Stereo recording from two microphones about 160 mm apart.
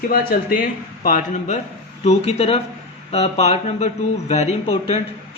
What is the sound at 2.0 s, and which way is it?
Speech, 40° left (ahead or behind).